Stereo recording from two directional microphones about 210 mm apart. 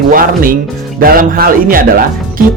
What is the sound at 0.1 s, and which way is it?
Speech, 40° right (ahead or behind).